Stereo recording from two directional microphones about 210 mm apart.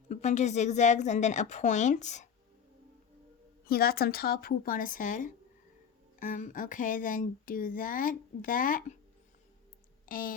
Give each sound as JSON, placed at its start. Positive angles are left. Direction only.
{"t": 0.1, "sound": "speech", "side_deg": 35}
{"t": 3.7, "sound": "speech", "side_deg": 45}
{"t": 10.1, "sound": "a sound", "side_deg": 40}